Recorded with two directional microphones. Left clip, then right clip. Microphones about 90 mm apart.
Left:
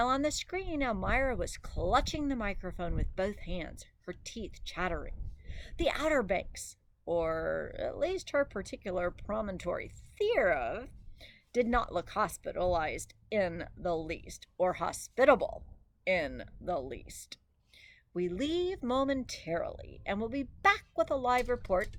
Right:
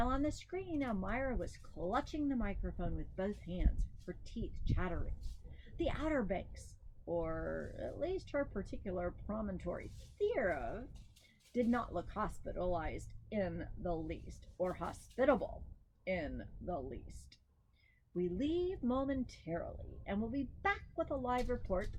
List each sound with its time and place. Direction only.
0.0 s a woman's voice: 25° left (ahead or behind)